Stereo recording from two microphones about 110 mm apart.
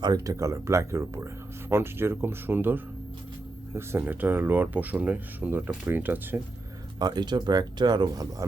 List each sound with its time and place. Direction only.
0.0 s speech: 35° right (ahead or behind); by 6.4 s 20° right (ahead or behind)
7.0 s speech: 40° right (ahead or behind)